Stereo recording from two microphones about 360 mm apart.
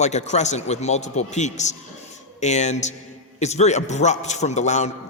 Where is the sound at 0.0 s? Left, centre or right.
Centre.